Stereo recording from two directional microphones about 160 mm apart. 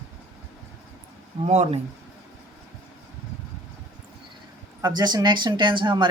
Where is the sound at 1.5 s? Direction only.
45° right (ahead or behind).